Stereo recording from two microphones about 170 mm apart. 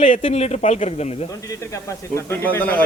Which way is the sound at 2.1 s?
15° left (ahead or behind).